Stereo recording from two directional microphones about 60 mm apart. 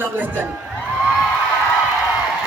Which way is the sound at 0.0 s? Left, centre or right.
Right.